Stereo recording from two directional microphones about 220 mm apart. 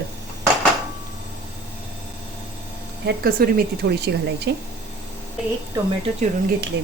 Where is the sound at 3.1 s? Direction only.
45° right (ahead or behind).